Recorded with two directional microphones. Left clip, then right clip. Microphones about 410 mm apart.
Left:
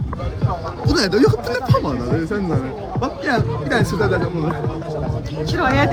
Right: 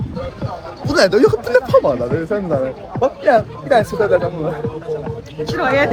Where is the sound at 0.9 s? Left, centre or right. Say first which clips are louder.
Right 4 dB; centre.